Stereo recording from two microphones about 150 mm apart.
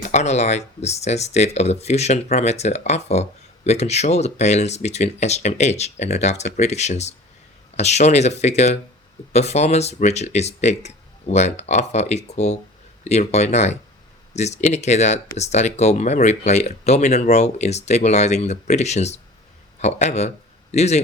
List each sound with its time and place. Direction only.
0.1 s speech: 50° left (ahead or behind)